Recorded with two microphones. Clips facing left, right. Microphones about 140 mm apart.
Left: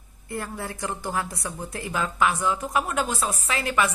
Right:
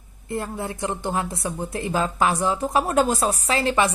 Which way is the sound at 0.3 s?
25° right (ahead or behind).